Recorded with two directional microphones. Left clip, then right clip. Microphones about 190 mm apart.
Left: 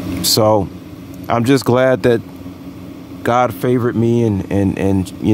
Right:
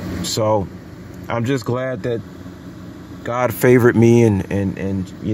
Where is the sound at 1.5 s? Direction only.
30° left (ahead or behind).